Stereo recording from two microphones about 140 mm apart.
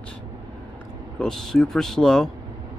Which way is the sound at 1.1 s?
5° left (ahead or behind).